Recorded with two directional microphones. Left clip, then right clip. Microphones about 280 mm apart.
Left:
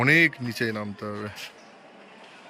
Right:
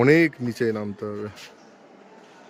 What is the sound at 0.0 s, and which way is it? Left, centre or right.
Speech, centre.